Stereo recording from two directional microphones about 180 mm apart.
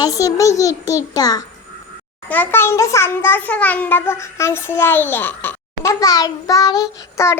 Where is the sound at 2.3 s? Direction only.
10° left (ahead or behind).